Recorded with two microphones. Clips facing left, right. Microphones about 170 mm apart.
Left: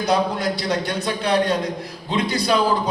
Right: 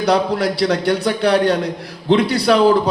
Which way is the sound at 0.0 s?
70° right (ahead or behind).